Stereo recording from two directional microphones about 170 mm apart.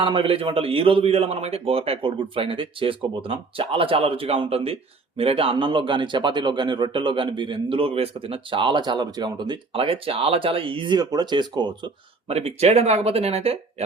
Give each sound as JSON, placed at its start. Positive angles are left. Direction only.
{"t": 0.0, "sound": "a man's voice", "side_deg": -30}
{"t": 12.3, "sound": "a man's voice", "side_deg": -35}